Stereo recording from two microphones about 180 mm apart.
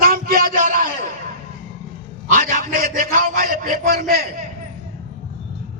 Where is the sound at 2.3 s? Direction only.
45° right (ahead or behind).